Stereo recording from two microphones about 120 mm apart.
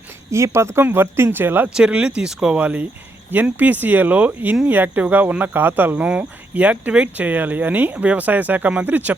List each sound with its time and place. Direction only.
0.3 s speech: 25° right (ahead or behind)